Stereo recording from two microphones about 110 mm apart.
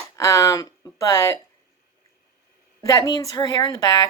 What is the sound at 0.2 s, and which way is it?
Speech, 25° left (ahead or behind).